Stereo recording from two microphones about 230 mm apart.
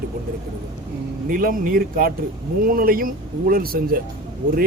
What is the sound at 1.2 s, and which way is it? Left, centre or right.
Speech, right.